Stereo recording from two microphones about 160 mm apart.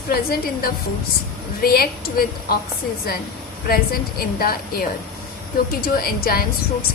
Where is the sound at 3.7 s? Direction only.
70° left (ahead or behind).